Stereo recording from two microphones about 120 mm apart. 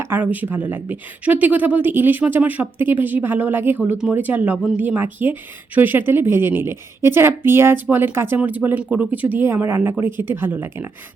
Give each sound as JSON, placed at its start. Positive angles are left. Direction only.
{"t": 0.0, "sound": "speech", "side_deg": -15}